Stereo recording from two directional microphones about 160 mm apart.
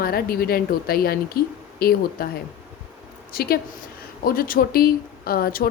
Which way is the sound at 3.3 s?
70° left (ahead or behind).